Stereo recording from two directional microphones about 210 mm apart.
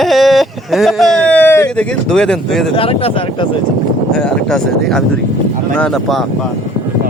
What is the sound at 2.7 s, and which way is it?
Speech, 25° left (ahead or behind).